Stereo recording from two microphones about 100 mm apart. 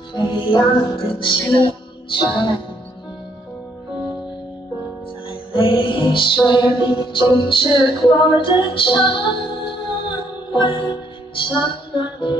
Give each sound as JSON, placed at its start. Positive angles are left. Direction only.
{"t": 0.1, "sound": "music", "side_deg": 50}
{"t": 5.3, "sound": "music", "side_deg": 55}